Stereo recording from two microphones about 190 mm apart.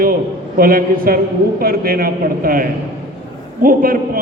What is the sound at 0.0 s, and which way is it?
A man's voice, 50° right (ahead or behind).